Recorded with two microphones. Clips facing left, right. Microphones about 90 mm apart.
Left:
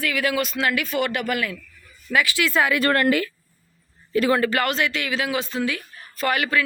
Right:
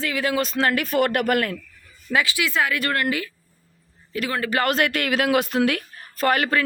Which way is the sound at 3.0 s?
60° left (ahead or behind).